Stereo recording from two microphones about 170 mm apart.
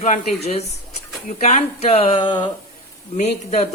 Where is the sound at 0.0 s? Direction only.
45° left (ahead or behind); by 2.5 s 25° left (ahead or behind).